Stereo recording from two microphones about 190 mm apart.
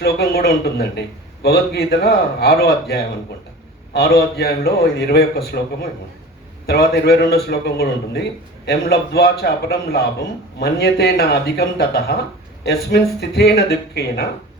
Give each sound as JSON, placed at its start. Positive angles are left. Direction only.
{"t": 0.0, "sound": "a man's voice", "side_deg": 55}
{"t": 6.7, "sound": "a man's voice", "side_deg": 55}